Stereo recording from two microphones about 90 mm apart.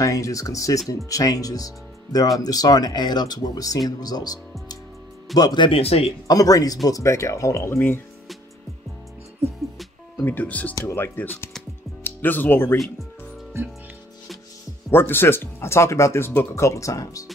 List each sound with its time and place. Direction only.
0.0 s speech: 35° left (ahead or behind)
5.7 s speech: 90° left
6.2 s speech: 40° left (ahead or behind)
10.1 s speech: 20° left (ahead or behind)
10.7 s speech: 40° left (ahead or behind)
11.0 s speech: 20° left (ahead or behind)
14.9 s speech: 25° left (ahead or behind)
16.5 s speech: 35° left (ahead or behind)